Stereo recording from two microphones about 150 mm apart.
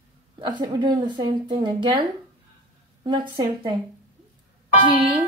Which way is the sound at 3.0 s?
30° right (ahead or behind).